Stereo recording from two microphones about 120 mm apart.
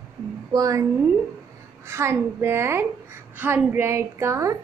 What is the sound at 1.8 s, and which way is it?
A woman's voice, 20° right (ahead or behind).